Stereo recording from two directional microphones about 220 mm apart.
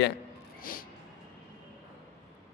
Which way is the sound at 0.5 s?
40° left (ahead or behind).